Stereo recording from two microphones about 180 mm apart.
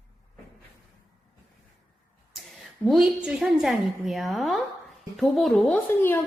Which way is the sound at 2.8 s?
5° right (ahead or behind).